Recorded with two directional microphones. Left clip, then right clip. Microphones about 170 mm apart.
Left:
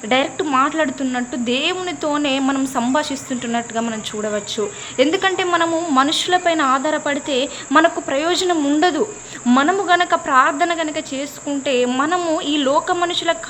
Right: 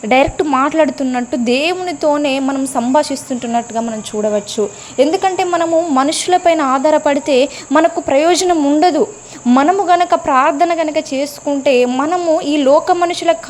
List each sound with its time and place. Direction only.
0.1 s speech: 40° right (ahead or behind)
2.4 s a woman's voice: 15° right (ahead or behind)
6.0 s speech: 30° right (ahead or behind)
11.9 s speech: 25° right (ahead or behind)